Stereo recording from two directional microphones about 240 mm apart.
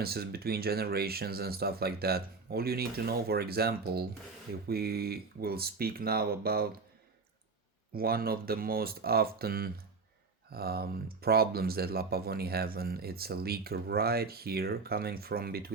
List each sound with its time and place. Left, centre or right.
0.0 s speech: right
7.9 s speech: right